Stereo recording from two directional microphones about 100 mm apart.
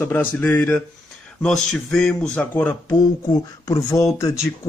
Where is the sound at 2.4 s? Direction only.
20° left (ahead or behind).